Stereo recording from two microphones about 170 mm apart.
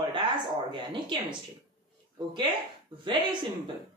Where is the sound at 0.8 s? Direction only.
25° right (ahead or behind).